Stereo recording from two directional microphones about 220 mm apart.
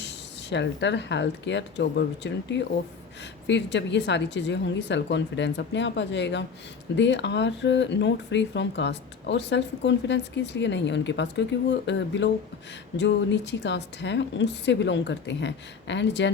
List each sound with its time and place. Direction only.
0.5 s speech: 55° left (ahead or behind)